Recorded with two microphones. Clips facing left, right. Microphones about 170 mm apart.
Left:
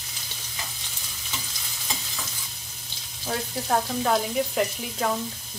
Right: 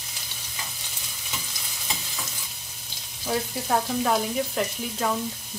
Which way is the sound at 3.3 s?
Centre (ahead or behind).